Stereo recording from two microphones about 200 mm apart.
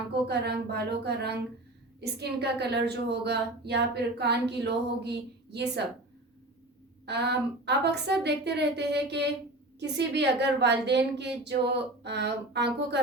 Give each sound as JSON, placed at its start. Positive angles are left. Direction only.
{"t": 0.3, "sound": "a woman's voice", "side_deg": -55}
{"t": 7.0, "sound": "a woman's voice", "side_deg": -55}